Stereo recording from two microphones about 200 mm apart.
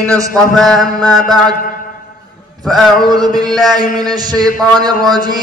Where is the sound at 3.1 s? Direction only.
20° right (ahead or behind).